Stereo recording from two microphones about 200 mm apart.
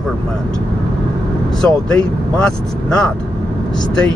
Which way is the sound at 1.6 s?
5° left (ahead or behind).